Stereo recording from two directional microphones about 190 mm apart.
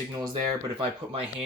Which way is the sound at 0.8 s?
30° right (ahead or behind).